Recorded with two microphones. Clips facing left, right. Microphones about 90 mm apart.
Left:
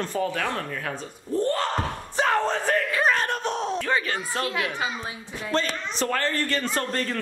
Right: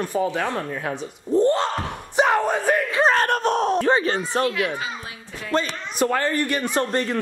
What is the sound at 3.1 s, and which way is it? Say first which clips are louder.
Groan: right 6 dB; 55° right (ahead or behind).